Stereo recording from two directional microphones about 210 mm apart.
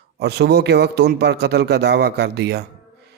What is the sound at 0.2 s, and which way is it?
Speech, 50° right (ahead or behind).